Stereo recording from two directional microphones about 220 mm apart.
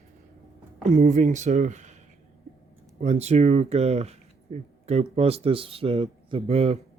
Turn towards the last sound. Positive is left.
turn(degrees=-30)  # may be behind; listen again after turning